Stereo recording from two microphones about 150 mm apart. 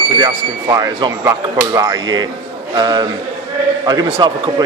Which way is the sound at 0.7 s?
25° right (ahead or behind).